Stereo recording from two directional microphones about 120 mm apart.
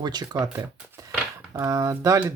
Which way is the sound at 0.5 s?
25° right (ahead or behind).